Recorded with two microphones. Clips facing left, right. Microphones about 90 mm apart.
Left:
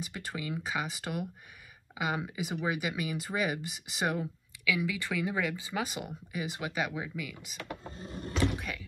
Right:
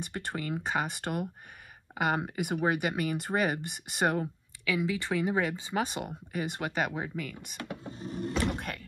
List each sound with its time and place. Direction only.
0.0 s speech: 50° right (ahead or behind)
4.7 s speech: 30° right (ahead or behind)
5.9 s speech: 45° right (ahead or behind)
7.9 s a sound: 20° right (ahead or behind)
8.5 s rowboat: 55° right (ahead or behind)